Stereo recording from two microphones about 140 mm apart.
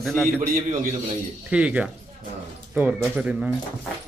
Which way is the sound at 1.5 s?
10° right (ahead or behind).